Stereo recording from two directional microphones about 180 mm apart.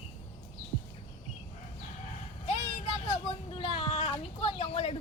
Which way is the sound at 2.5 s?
35° left (ahead or behind).